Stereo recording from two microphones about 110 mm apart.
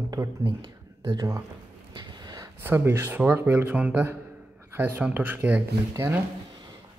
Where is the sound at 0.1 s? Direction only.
25° right (ahead or behind).